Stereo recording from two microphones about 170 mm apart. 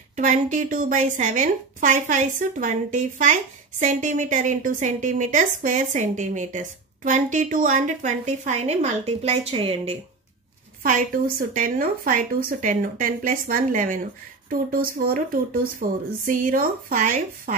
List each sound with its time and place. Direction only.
0.1 s a woman's voice: 45° right (ahead or behind)
10.8 s a woman's voice: 55° right (ahead or behind)